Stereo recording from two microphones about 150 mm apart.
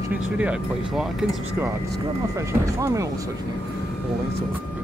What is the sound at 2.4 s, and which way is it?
Speech, 20° right (ahead or behind).